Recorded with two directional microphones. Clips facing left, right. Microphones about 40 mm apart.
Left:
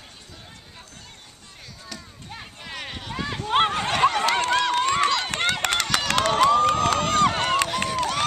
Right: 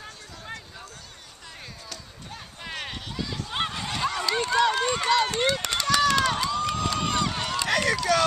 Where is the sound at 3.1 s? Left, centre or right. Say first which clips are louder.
Left 11 dB; left.